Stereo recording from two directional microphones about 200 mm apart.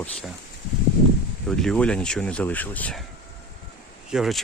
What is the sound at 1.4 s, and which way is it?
Speech, 5° left (ahead or behind).